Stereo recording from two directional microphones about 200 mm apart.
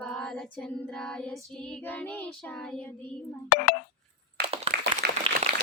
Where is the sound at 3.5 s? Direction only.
50° left (ahead or behind).